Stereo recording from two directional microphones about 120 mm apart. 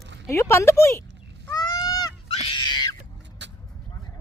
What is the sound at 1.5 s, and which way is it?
Goose, 35° left (ahead or behind).